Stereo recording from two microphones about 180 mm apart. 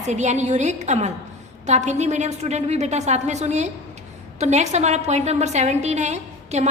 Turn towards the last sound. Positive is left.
turn(degrees=-40)  # may be behind; listen again after turning